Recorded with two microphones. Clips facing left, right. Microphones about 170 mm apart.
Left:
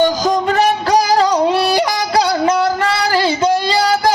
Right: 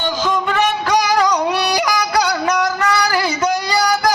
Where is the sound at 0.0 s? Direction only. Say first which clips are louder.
Left 5 dB; 40° left (ahead or behind).